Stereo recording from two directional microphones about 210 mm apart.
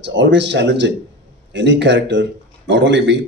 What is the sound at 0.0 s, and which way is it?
Speech, 60° right (ahead or behind).